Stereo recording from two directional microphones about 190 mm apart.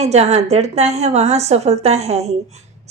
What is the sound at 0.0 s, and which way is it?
A woman's voice, 35° right (ahead or behind).